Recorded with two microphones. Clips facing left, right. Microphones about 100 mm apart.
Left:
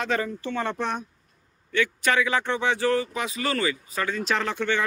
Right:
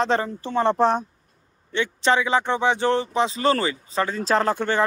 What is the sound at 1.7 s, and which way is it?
Speech, 25° right (ahead or behind).